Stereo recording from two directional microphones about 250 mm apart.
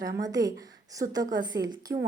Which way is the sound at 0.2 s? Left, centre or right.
Centre.